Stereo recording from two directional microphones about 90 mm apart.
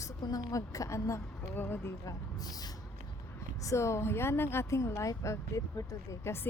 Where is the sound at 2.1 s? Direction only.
45° left (ahead or behind).